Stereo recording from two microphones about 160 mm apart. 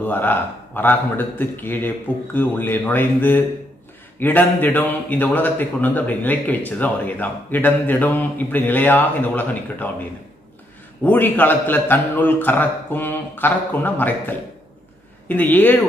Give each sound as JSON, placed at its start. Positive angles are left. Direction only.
{"t": 0.0, "sound": "a man's voice", "side_deg": 10}
{"t": 11.0, "sound": "a man's voice", "side_deg": 10}